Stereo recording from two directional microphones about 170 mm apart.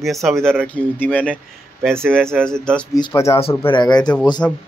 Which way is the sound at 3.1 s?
15° left (ahead or behind).